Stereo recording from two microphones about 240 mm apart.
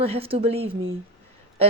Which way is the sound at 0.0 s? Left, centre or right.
Right.